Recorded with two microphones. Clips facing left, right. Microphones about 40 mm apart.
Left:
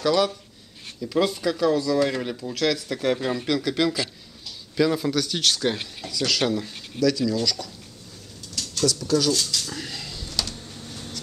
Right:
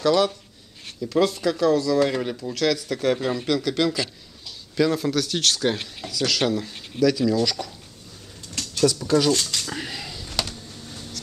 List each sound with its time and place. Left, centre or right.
0.0 s speech: centre
7.0 s speech: centre
8.6 s a sound: right
9.0 s speech: right